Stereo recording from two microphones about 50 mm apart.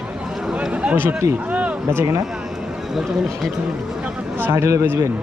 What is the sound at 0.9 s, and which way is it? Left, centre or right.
Speech, right.